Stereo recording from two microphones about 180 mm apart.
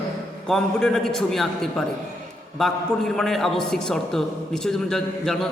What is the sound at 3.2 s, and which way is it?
A man's voice, centre (ahead or behind).